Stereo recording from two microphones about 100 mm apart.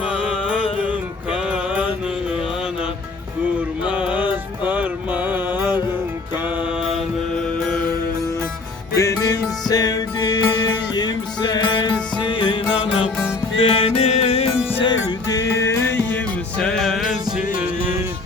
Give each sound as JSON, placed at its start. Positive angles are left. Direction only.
{"t": 0.3, "sound": "music", "side_deg": -10}
{"t": 3.8, "sound": "music", "side_deg": -10}
{"t": 9.0, "sound": "music", "side_deg": 35}
{"t": 13.6, "sound": "music", "side_deg": 75}
{"t": 14.7, "sound": "music", "side_deg": 65}
{"t": 15.3, "sound": "music", "side_deg": 35}